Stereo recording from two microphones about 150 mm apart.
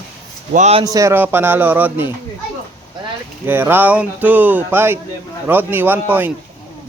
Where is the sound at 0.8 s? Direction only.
25° right (ahead or behind).